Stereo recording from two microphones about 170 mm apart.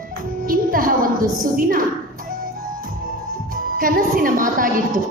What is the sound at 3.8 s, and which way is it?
Speech, 55° right (ahead or behind).